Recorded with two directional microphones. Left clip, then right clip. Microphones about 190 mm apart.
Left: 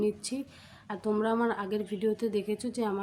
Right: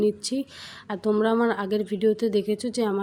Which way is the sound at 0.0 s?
30° right (ahead or behind).